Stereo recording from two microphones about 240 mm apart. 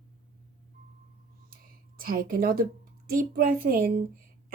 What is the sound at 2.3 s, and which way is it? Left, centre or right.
A woman's voice, right.